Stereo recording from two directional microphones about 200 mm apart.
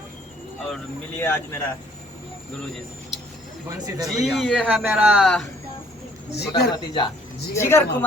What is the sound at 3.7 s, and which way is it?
Speech, 20° right (ahead or behind).